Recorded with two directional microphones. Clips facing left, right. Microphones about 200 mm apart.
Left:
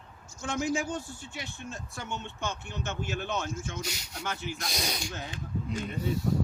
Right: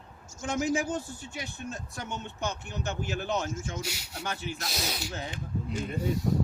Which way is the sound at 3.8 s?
10° right (ahead or behind).